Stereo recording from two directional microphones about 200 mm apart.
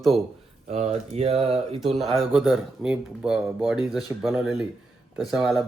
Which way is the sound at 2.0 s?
Centre (ahead or behind).